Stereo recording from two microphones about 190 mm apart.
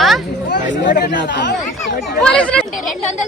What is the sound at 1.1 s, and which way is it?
Speech, 65° left (ahead or behind).